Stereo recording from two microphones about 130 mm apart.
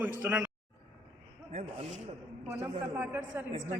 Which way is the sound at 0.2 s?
15° right (ahead or behind).